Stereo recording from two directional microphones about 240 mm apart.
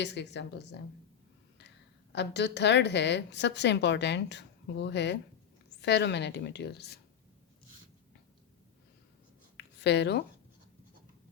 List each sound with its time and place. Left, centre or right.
0.0 s a woman's voice: left
2.1 s a woman's voice: left
9.6 s a sound: left